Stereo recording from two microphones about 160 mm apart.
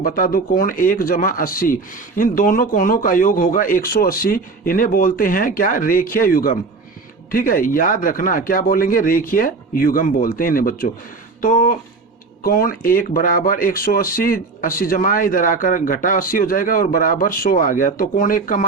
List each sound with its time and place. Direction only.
0.0 s speech: 65° left (ahead or behind)